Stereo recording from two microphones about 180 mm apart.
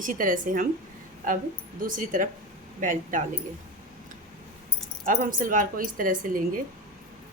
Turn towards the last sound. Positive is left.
turn(degrees=-50)  # may be behind; listen again after turning